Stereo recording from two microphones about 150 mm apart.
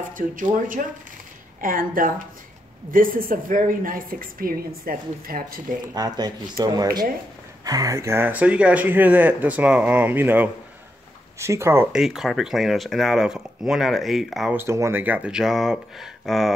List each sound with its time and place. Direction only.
0.1 s a woman's voice: 65° right (ahead or behind)
5.9 s speech: 25° right (ahead or behind)
11.9 s speech: centre (ahead or behind)
14.6 s speech: 15° right (ahead or behind); by 16.5 s centre (ahead or behind)